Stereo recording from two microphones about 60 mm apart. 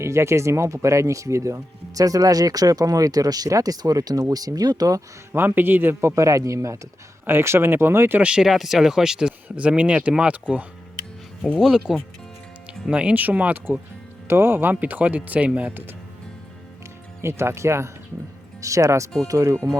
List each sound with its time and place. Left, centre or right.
0.0 s speech: right
5.3 s speech: right
6.1 s a man's voice: right
7.3 s speech: right
8.2 s speech: centre
8.4 s speech: centre
9.6 s speech: right
11.6 s speech: centre
12.9 s speech: centre
14.3 s speech: right
17.2 s speech: right
18.6 s a man's voice: right